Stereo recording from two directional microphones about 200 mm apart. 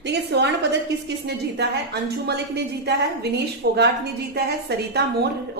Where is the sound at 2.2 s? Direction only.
55° right (ahead or behind).